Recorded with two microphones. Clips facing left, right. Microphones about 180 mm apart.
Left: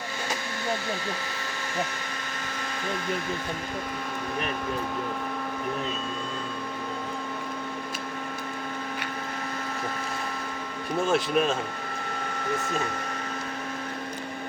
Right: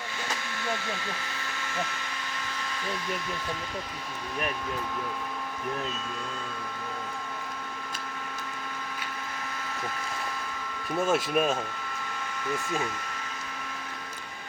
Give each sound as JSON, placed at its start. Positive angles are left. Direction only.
{"t": 11.0, "sound": "speech", "side_deg": -5}